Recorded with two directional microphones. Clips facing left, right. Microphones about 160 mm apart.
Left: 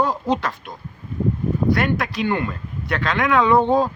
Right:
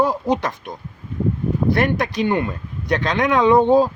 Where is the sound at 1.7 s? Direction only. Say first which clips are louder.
Right 2 dB; 20° right (ahead or behind).